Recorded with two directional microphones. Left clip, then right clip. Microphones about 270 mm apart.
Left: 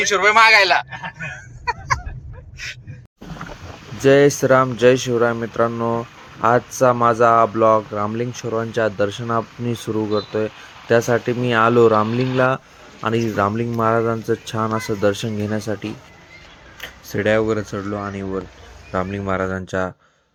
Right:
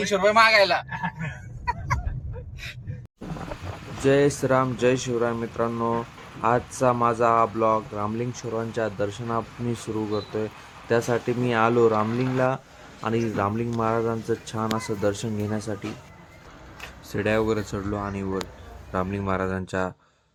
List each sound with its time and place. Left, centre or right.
0.0 s speech: centre
4.0 s speech: centre
16.8 s speech: centre